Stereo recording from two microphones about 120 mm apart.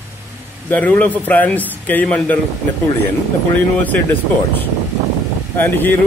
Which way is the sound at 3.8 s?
15° left (ahead or behind).